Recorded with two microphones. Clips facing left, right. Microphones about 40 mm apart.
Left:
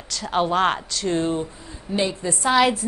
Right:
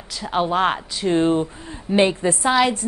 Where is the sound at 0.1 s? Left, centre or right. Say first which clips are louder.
Even; centre.